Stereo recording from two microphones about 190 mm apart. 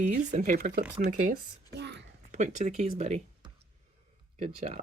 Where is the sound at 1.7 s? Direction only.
65° right (ahead or behind).